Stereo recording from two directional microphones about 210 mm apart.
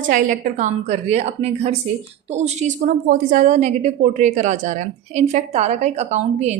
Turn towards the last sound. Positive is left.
turn(degrees=-35)  # may be behind; listen again after turning